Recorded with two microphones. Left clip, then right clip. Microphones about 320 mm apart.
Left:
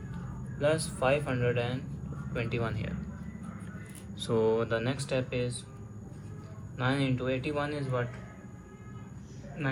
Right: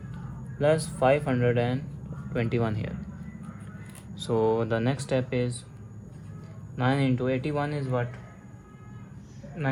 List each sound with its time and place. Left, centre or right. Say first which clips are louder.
0.6 s speech: right 5 dB; right
4.1 s speech: right 3 dB; right
6.7 s speech: right 4 dB; right
9.6 s speech: right 4 dB; right